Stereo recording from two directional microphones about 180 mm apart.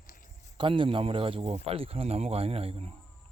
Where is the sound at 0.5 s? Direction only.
30° right (ahead or behind).